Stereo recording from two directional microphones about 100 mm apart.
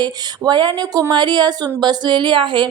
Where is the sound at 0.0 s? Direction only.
45° right (ahead or behind).